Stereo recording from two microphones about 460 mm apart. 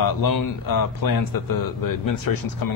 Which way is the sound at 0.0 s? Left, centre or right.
Left.